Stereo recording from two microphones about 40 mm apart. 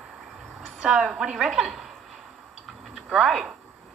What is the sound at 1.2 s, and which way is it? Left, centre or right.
Speech, centre.